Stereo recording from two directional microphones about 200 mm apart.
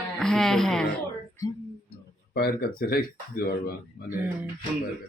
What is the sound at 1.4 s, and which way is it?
Speech, 15° left (ahead or behind).